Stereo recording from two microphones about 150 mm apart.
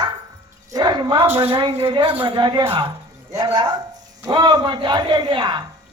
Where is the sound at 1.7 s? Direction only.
35° right (ahead or behind).